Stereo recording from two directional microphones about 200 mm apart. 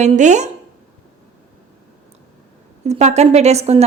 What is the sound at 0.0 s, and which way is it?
Speech, 35° right (ahead or behind).